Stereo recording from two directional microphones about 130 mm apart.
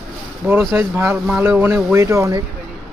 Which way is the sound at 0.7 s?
15° right (ahead or behind).